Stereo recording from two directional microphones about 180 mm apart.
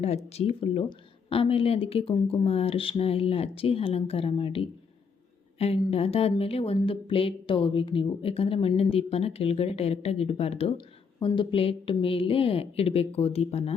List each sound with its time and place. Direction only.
0.3 s speech: 35° left (ahead or behind)